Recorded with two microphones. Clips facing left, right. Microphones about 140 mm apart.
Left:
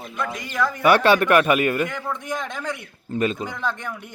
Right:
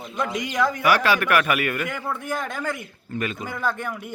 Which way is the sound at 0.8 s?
30° left (ahead or behind).